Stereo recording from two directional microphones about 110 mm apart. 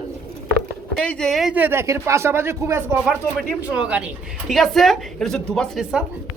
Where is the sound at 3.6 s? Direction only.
10° right (ahead or behind); by 5.7 s 10° left (ahead or behind).